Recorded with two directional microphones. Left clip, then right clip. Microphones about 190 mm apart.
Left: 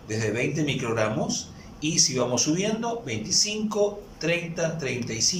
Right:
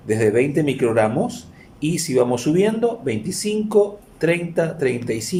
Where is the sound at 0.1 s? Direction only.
50° right (ahead or behind).